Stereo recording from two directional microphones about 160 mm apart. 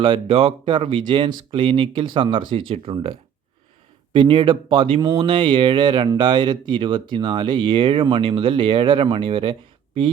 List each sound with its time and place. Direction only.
0.0 s speech: 35° right (ahead or behind)